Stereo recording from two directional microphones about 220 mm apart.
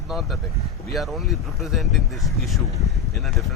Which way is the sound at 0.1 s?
Centre (ahead or behind).